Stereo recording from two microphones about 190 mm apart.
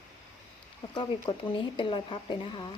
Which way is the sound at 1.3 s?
25° left (ahead or behind).